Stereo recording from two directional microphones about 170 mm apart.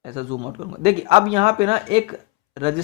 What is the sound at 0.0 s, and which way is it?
Speech, 35° right (ahead or behind).